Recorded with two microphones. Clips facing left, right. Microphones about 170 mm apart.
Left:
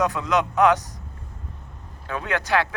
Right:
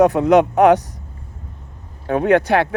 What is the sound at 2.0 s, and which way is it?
Speech, 55° right (ahead or behind).